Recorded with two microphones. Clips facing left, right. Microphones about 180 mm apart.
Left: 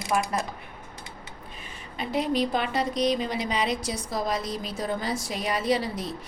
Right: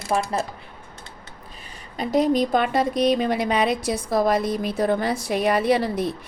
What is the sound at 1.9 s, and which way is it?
A woman's voice, 40° right (ahead or behind).